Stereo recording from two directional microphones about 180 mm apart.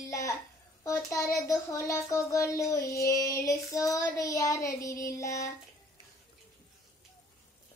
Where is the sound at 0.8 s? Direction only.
15° left (ahead or behind).